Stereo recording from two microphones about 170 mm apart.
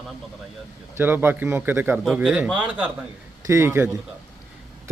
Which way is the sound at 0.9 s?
10° right (ahead or behind).